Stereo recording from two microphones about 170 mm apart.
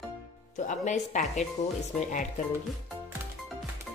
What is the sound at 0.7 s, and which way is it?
Speech, 45° left (ahead or behind).